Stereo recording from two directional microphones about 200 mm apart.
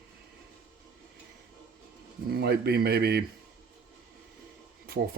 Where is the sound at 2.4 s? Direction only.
55° right (ahead or behind).